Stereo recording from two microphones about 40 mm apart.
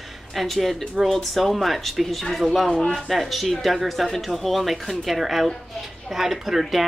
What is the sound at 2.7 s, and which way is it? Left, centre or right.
Speech, centre.